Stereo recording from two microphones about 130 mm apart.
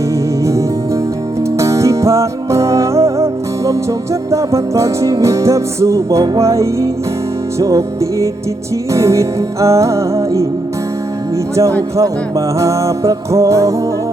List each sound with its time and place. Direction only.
1.5 s music: 25° right (ahead or behind)
12.5 s music: 25° right (ahead or behind)